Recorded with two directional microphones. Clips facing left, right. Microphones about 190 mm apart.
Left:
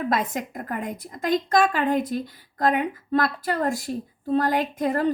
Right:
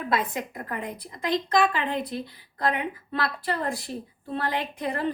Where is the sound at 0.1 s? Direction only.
45° left (ahead or behind).